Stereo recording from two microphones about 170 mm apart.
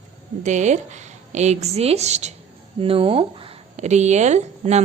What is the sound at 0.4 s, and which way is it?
A woman's voice, 45° right (ahead or behind).